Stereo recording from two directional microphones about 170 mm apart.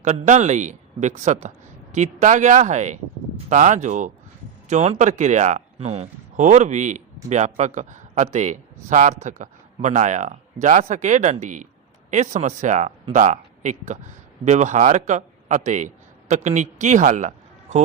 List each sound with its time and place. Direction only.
0.0 s a man's voice: 45° right (ahead or behind)